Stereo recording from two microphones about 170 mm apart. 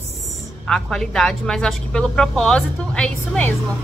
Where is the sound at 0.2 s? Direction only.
Centre (ahead or behind).